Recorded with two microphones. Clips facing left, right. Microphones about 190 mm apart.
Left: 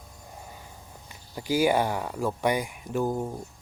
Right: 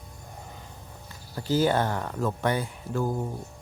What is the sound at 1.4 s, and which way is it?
Speech, 10° left (ahead or behind).